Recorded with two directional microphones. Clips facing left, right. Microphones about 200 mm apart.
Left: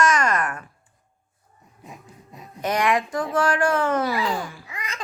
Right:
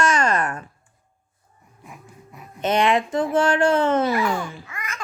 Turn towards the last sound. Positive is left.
turn(degrees=15)  # may be behind; listen again after turning